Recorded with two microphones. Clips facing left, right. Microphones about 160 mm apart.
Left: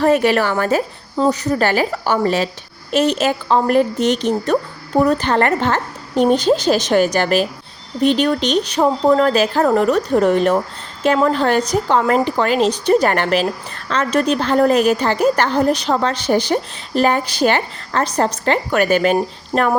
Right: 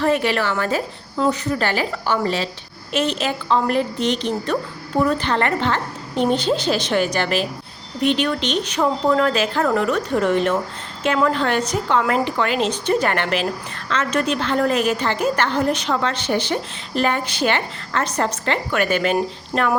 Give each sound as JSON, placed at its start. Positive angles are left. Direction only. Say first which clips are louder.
{"t": 0.0, "sound": "a woman's voice", "louder": "left 5 dB", "side_deg": 45}
{"t": 19.5, "sound": "music", "louder": "left 4 dB", "side_deg": 30}